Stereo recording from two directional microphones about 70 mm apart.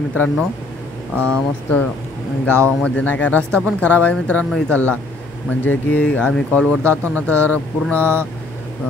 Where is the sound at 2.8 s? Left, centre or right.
Centre.